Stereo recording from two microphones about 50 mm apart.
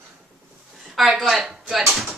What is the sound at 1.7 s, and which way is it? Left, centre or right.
Speech, centre.